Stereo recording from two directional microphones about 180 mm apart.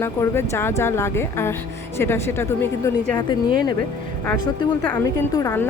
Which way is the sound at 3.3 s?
25° left (ahead or behind).